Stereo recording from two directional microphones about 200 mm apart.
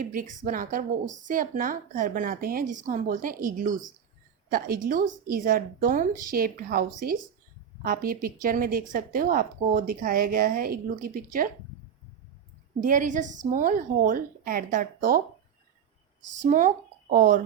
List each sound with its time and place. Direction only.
0.0 s a woman's voice: 40° right (ahead or behind)
12.8 s a woman's voice: 40° right (ahead or behind)
16.3 s speech: 40° right (ahead or behind)